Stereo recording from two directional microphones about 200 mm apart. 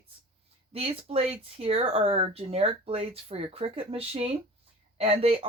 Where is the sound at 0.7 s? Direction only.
30° right (ahead or behind).